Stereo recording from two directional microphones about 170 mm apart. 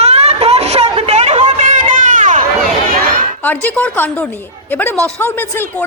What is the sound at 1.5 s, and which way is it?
Run, 45° right (ahead or behind).